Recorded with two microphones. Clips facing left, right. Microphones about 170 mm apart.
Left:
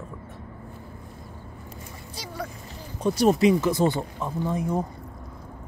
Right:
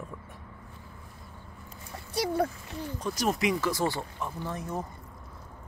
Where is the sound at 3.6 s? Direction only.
20° left (ahead or behind).